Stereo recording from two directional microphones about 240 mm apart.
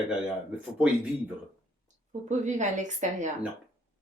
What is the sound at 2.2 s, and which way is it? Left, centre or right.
A woman's voice, right.